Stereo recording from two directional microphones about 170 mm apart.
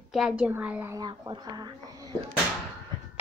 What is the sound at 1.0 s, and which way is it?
Speech, 25° right (ahead or behind).